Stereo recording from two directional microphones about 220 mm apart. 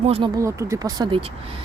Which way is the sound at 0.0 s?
25° right (ahead or behind).